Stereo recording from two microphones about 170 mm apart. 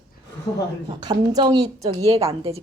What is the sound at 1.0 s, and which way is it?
A woman's voice, 25° right (ahead or behind).